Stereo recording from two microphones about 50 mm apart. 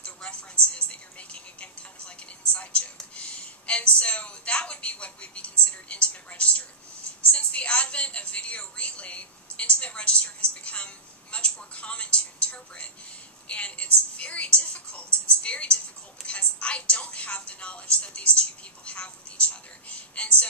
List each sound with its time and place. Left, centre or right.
0.0 s music: left
7.2 s a woman's voice: left